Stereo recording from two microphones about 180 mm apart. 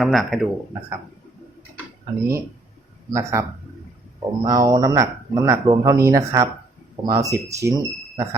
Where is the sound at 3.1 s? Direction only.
15° right (ahead or behind).